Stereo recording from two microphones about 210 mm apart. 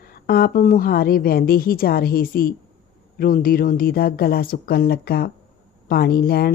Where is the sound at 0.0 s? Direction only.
45° left (ahead or behind).